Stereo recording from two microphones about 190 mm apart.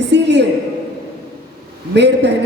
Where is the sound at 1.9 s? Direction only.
65° right (ahead or behind).